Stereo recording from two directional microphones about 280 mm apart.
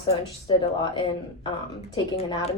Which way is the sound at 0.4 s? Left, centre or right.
Centre.